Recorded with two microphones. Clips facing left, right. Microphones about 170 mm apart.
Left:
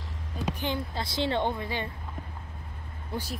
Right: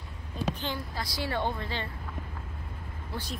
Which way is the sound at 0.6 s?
20° left (ahead or behind).